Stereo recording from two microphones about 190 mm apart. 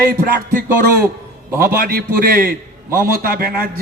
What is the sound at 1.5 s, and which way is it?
A man's voice, 50° right (ahead or behind).